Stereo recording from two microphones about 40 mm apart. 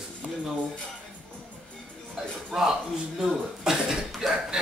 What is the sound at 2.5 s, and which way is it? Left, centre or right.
Speech, centre.